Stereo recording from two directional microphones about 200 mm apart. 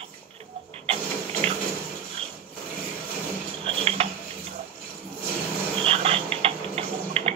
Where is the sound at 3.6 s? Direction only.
30° right (ahead or behind).